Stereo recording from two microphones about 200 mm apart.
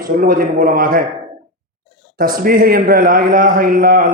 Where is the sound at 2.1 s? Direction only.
45° right (ahead or behind).